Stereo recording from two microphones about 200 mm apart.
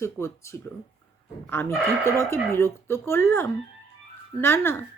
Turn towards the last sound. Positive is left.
turn(degrees=10)  # may be behind; listen again after turning